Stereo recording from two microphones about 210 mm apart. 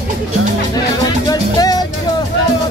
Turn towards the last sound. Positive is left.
turn(degrees=20)  # may be behind; listen again after turning